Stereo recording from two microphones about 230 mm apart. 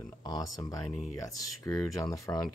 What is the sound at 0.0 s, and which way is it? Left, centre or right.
Speech, centre.